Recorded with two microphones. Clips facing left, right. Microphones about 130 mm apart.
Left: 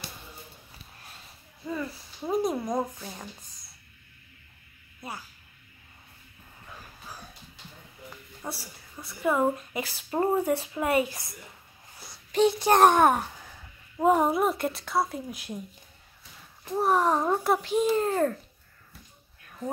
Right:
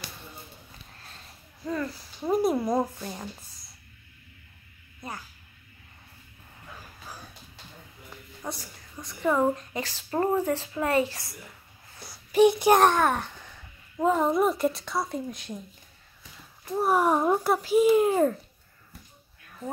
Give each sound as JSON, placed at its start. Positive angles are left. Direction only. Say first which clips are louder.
{"t": 1.6, "sound": "speech", "louder": "right 2 dB", "side_deg": 5}
{"t": 8.4, "sound": "speech", "louder": "right 1 dB", "side_deg": 5}
{"t": 12.3, "sound": "a child's voice", "louder": "right 4 dB", "side_deg": -15}
{"t": 12.8, "sound": "speech", "louder": "left 3 dB", "side_deg": 15}
{"t": 14.4, "sound": "speech", "louder": "right 2 dB", "side_deg": 0}
{"t": 16.7, "sound": "a child's voice", "louder": "right 1 dB", "side_deg": -5}